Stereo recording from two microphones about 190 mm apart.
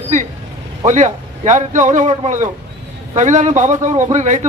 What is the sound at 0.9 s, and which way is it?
A man's voice, 40° right (ahead or behind).